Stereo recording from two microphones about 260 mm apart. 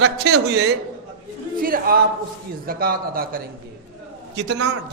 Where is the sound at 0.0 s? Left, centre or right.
Right.